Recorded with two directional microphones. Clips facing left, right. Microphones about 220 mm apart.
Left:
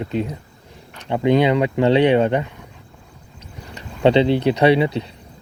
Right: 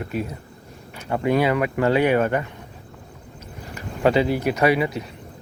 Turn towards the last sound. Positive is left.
turn(degrees=30)  # may be behind; listen again after turning